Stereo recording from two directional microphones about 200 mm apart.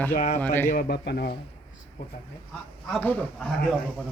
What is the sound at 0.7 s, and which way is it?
Speech, 50° left (ahead or behind).